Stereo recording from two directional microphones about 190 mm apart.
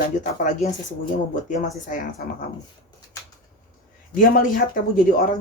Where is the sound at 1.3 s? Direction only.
40° left (ahead or behind).